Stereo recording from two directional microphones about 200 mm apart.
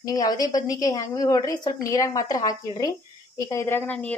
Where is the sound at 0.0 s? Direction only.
20° left (ahead or behind).